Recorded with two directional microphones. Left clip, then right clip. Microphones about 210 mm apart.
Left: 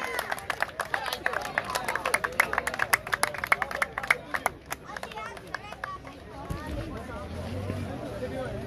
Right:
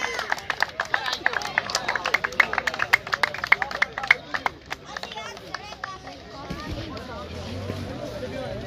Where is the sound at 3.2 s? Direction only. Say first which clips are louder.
Right 5 dB; 55° left (ahead or behind).